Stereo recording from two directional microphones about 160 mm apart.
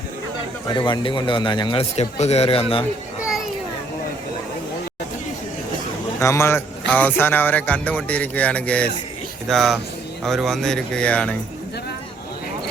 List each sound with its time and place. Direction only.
0.8 s a man's voice: 30° left (ahead or behind)
6.1 s speech: 15° left (ahead or behind)